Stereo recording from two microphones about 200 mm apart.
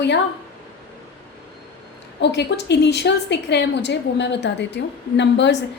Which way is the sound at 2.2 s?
55° left (ahead or behind).